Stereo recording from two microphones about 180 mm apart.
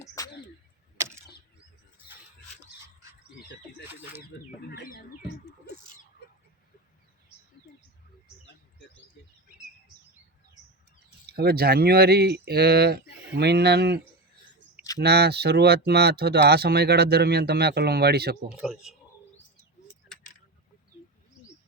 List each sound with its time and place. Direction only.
0.0 s bird: 15° left (ahead or behind)
0.9 s a sound: 15° right (ahead or behind)
4.3 s speech: 90° left
4.7 s bird: 55° left (ahead or behind)
11.3 s speech: 60° right (ahead or behind)
15.0 s speech: 65° right (ahead or behind)
18.4 s speech: 5° right (ahead or behind)